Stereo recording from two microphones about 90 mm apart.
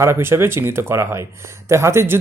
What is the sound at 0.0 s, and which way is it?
Speech, 30° right (ahead or behind).